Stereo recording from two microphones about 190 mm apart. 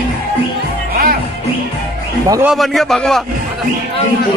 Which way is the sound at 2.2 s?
15° right (ahead or behind).